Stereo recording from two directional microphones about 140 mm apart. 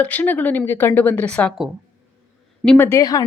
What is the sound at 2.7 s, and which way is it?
Speech, 20° left (ahead or behind).